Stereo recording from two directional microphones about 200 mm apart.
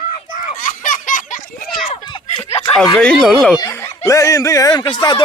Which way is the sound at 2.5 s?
30° left (ahead or behind).